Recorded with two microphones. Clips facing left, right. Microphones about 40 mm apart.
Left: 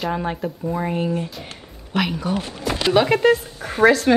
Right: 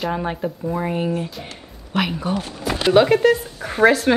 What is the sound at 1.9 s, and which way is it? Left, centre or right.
Speech, centre.